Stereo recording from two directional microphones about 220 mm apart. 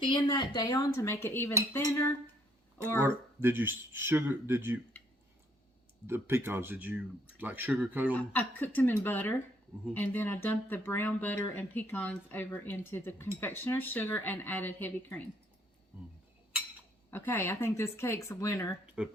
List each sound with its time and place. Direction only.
0.0 s speech: 20° left (ahead or behind)
3.0 s speech: 10° right (ahead or behind)
6.1 s speech: 10° right (ahead or behind)
8.1 s speech: 10° left (ahead or behind)
17.1 s speech: 10° left (ahead or behind)
19.0 s speech: 5° right (ahead or behind)